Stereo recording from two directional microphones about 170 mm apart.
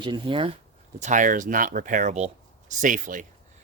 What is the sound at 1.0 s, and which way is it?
Speech, 45° right (ahead or behind).